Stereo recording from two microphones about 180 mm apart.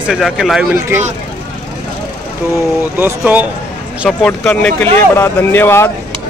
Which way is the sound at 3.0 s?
10° right (ahead or behind).